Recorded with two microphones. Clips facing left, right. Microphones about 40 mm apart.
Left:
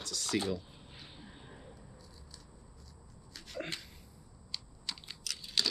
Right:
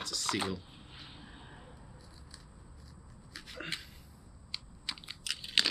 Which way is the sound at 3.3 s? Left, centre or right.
Centre.